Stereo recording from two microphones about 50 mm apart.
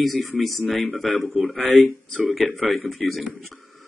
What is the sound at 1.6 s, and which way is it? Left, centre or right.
Speech, left.